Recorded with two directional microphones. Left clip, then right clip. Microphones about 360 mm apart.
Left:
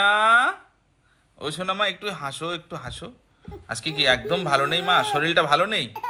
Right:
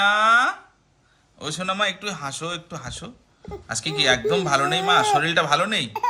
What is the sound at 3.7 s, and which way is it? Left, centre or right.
A man's voice, centre.